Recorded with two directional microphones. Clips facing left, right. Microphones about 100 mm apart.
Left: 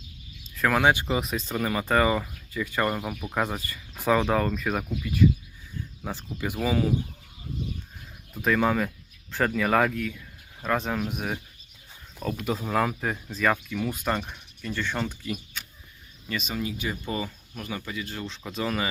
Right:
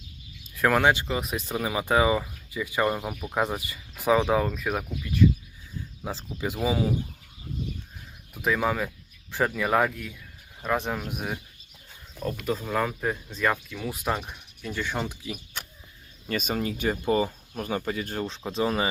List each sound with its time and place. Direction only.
0.5 s speech: 5° right (ahead or behind)
0.9 s speech: 15° left (ahead or behind)
1.4 s speech: 10° right (ahead or behind)
6.0 s speech: 5° right (ahead or behind)
6.4 s speech: 15° right (ahead or behind)
8.3 s speech: 10° right (ahead or behind)
16.3 s speech: 45° right (ahead or behind)
17.1 s speech: 35° right (ahead or behind)
18.4 s speech: 30° right (ahead or behind)